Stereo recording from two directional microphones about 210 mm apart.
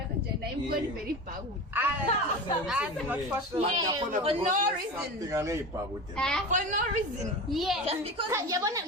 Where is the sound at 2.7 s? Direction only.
5° right (ahead or behind).